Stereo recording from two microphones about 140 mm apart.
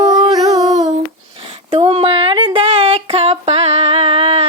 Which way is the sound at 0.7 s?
55° right (ahead or behind).